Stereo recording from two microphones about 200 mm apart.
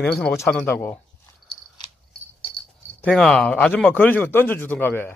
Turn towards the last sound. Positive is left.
turn(degrees=10)  # may be behind; listen again after turning